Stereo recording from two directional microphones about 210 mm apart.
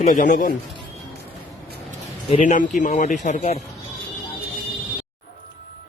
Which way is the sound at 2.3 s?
35° left (ahead or behind).